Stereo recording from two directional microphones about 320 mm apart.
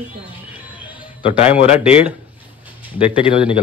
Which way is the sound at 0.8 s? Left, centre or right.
Centre.